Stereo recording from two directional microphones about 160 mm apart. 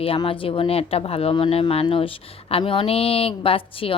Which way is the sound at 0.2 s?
35° left (ahead or behind).